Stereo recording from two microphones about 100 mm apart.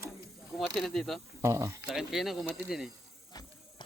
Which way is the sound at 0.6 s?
5° left (ahead or behind).